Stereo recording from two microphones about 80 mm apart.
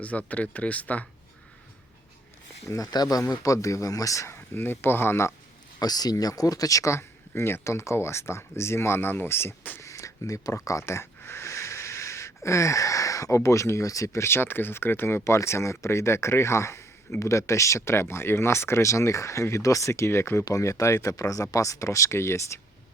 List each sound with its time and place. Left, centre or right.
0.0 s speech: centre
2.6 s speech: left
4.5 s speech: left
5.8 s speech: left
9.8 s speech: left